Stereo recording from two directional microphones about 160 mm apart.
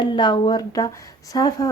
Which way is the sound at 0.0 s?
30° left (ahead or behind).